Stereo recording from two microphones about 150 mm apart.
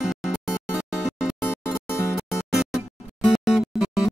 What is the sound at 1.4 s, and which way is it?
Music, 15° left (ahead or behind).